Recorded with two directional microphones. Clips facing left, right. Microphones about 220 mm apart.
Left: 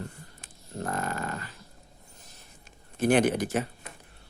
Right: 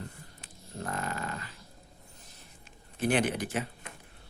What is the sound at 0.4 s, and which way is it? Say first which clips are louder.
Dog: left 4 dB; 45° left (ahead or behind).